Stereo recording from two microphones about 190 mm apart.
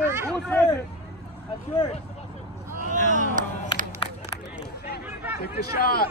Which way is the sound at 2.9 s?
40° right (ahead or behind).